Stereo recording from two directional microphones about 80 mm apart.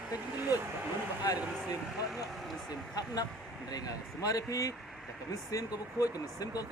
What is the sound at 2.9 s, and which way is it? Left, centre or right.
Speech, left.